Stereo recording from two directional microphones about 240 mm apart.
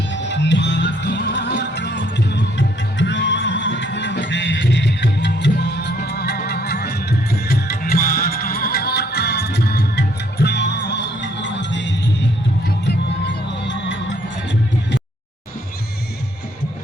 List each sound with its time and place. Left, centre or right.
0.3 s music: left